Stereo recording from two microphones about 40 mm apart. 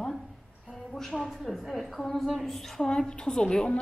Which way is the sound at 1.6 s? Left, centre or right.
Centre.